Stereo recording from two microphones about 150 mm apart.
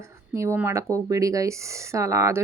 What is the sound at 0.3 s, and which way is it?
Speech, 15° right (ahead or behind).